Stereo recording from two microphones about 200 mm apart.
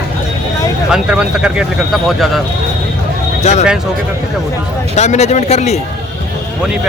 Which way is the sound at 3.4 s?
35° left (ahead or behind).